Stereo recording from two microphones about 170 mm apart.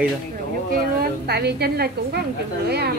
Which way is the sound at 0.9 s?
70° right (ahead or behind).